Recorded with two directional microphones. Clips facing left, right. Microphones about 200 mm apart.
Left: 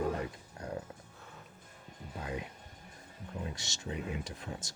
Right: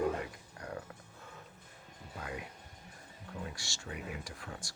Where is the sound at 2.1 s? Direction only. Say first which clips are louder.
Left 3 dB; 20° left (ahead or behind).